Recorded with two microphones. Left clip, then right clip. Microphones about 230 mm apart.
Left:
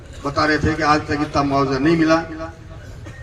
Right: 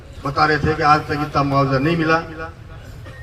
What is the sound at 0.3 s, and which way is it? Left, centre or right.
A man's voice, left.